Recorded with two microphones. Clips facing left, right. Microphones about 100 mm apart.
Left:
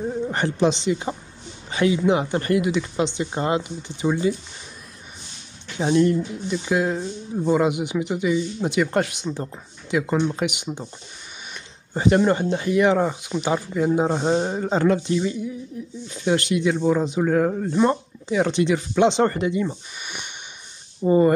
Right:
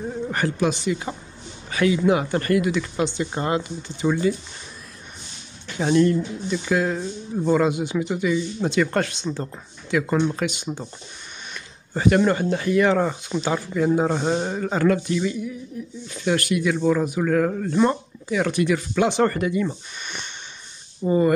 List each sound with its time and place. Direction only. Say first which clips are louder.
0.3 s speech: left 1 dB; 25° left (ahead or behind)
5.8 s speech: even; 20° left (ahead or behind)
19.7 s a sound: even; 10° left (ahead or behind)
21.1 s speech: left 2 dB; 30° left (ahead or behind)